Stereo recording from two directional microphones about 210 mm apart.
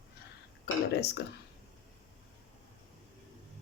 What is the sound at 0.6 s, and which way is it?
Speech, 50° left (ahead or behind).